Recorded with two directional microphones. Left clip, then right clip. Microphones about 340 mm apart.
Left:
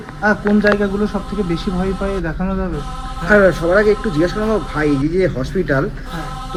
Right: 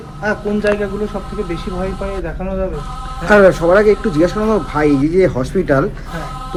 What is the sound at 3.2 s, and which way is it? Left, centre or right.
Speech, right.